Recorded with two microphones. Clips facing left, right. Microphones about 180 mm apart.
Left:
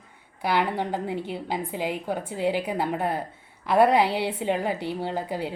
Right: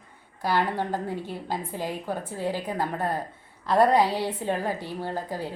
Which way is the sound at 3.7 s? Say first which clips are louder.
Left 1 dB; 10° left (ahead or behind).